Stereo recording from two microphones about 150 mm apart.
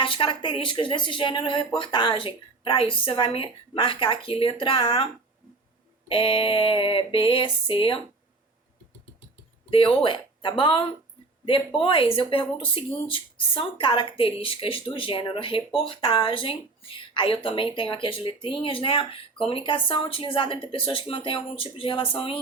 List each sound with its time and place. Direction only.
0.0 s speech: 35° left (ahead or behind)
6.1 s speech: 35° left (ahead or behind)
9.6 s speech: 35° left (ahead or behind)